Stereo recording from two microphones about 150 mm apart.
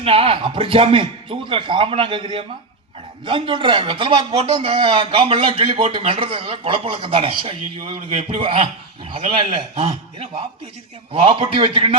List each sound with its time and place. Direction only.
0.0 s a man's voice: 35° right (ahead or behind)
3.2 s a man's voice: 35° right (ahead or behind)
9.0 s a man's voice: 35° right (ahead or behind)